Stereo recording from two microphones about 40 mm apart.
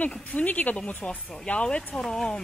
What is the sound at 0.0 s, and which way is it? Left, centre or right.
Speech, left.